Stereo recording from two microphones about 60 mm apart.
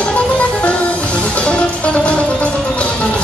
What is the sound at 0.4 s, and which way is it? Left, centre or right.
Music, left.